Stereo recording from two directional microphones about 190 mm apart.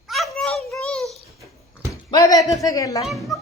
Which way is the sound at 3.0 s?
Centre (ahead or behind).